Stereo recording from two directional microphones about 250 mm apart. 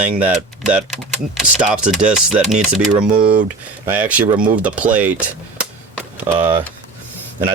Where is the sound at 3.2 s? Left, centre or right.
Right.